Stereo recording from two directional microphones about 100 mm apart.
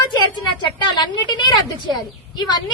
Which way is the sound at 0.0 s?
50° left (ahead or behind).